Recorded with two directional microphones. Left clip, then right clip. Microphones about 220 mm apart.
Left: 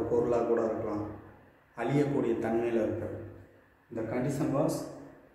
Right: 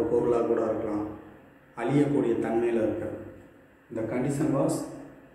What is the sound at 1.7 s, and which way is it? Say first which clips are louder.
Speech: right 4 dB; 10° left (ahead or behind).